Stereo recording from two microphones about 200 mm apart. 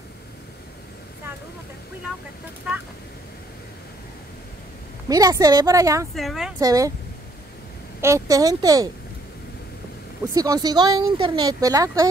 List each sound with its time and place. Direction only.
5.0 s a woman's voice: 20° right (ahead or behind)
6.1 s speech: centre (ahead or behind)
6.6 s a woman's voice: 15° right (ahead or behind)
8.0 s a woman's voice: 15° right (ahead or behind)
10.3 s speech: 20° right (ahead or behind)